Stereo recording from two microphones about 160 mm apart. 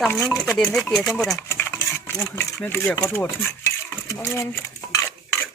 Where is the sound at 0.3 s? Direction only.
Centre (ahead or behind).